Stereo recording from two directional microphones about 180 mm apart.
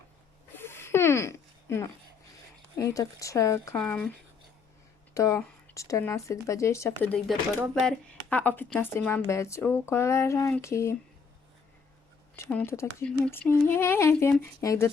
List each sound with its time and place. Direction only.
0.5 s a sound: 15° left (ahead or behind)
2.7 s speech: 20° left (ahead or behind)
5.1 s speech: 15° left (ahead or behind)
12.5 s speech: 10° left (ahead or behind)